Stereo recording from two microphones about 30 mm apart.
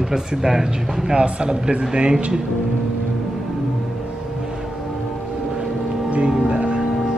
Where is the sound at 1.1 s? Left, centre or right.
Right.